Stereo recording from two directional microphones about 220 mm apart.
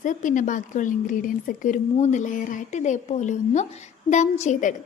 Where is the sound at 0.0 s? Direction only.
35° left (ahead or behind).